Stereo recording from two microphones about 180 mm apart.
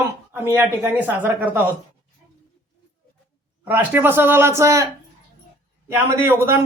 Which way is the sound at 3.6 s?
10° right (ahead or behind).